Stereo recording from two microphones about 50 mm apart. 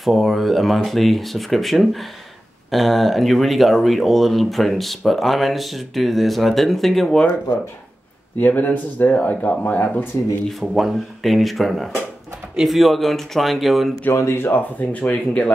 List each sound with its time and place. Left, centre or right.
0.0 s speech: centre
8.4 s speech: left
10.5 s speech: centre
14.1 s speech: left
14.8 s speech: left